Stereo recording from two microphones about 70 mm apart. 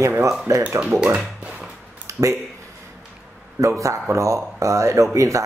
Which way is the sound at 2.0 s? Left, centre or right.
Right.